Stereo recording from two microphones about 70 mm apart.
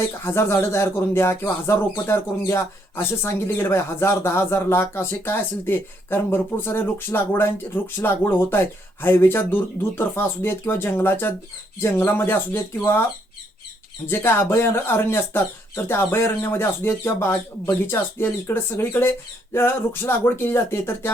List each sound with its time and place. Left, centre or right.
0.3 s speech: left
14.1 s speech: left